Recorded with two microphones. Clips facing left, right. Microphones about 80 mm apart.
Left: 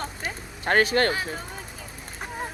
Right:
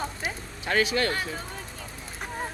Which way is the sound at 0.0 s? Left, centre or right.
Centre.